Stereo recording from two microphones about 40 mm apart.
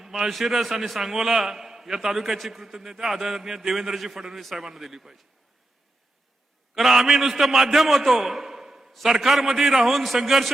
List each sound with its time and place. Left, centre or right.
0.0 s a man's voice: centre
6.7 s a man's voice: centre